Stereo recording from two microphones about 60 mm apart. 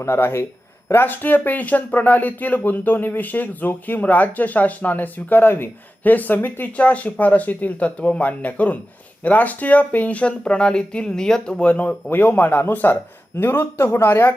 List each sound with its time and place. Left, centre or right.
0.0 s speech: left; by 11.6 s centre
11.6 s speech: left